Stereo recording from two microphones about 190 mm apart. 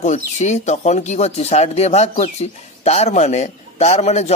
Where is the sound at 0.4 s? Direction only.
35° left (ahead or behind).